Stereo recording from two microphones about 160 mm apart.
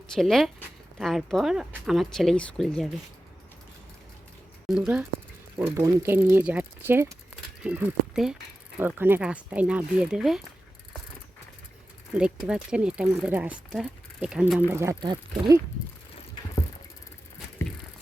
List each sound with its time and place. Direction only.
0.1 s speech: centre (ahead or behind)
4.7 s speech: 5° right (ahead or behind)
12.1 s speech: 5° right (ahead or behind)
14.7 s speech: 15° right (ahead or behind)